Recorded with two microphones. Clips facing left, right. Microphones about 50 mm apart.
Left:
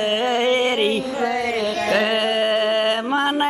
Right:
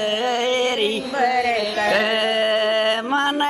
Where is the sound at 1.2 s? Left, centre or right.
Right.